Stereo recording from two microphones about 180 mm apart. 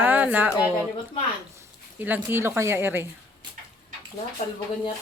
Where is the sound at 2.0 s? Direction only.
10° right (ahead or behind).